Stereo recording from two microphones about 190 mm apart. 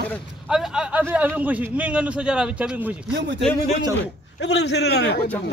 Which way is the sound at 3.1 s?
65° right (ahead or behind).